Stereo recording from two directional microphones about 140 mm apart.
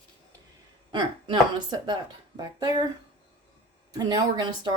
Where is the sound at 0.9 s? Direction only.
35° right (ahead or behind).